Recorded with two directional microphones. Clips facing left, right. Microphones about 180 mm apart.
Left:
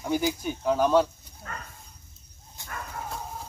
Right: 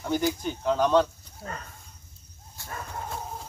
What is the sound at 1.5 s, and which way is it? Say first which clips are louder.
Speech: right 2 dB; 35° right (ahead or behind).